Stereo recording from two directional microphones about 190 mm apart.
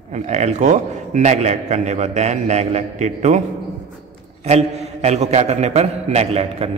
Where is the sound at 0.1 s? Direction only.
35° right (ahead or behind).